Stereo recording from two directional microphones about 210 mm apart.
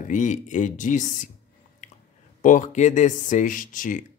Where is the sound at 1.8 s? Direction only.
35° left (ahead or behind).